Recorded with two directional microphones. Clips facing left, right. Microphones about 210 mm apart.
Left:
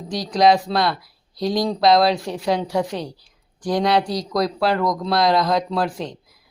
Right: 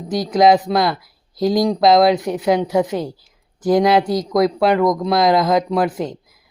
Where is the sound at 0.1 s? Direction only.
20° right (ahead or behind).